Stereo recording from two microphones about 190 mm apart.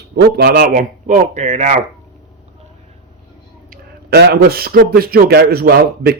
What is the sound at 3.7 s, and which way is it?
A man's voice, 60° right (ahead or behind).